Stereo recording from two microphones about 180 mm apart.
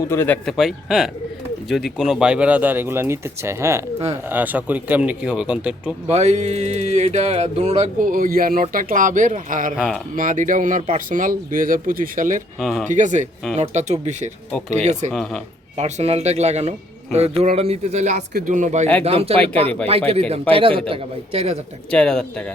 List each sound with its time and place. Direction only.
0.0 s speech: 15° left (ahead or behind)
0.4 s speech: centre (ahead or behind)
6.1 s speech: 40° right (ahead or behind)
9.7 s speech: centre (ahead or behind)
10.2 s speech: 45° right (ahead or behind)
12.5 s speech: centre (ahead or behind)
12.9 s speech: 45° right (ahead or behind)
15.1 s speech: 5° left (ahead or behind)
15.8 s speech: 35° right (ahead or behind)
21.8 s speech: 5° left (ahead or behind)